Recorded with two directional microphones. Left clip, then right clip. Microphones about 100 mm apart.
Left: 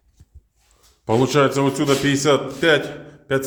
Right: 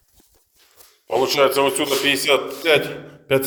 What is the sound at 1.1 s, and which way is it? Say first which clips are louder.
Speech: right 1 dB; 10° left (ahead or behind).